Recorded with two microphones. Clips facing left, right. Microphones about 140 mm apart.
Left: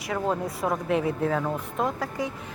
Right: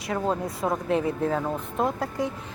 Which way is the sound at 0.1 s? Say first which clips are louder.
Even; 20° right (ahead or behind).